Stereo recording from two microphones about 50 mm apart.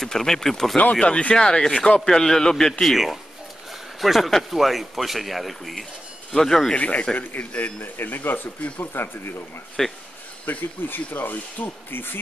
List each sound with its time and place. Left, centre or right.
0.0 s speech: centre
0.9 s speech: left
4.0 s speech: centre
6.7 s a man's voice: left
9.8 s speech: centre
10.4 s speech: left